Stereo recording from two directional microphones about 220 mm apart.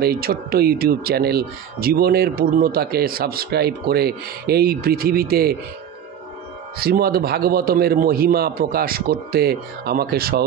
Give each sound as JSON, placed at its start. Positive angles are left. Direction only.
{"t": 0.0, "sound": "speech", "side_deg": -45}
{"t": 6.8, "sound": "speech", "side_deg": -45}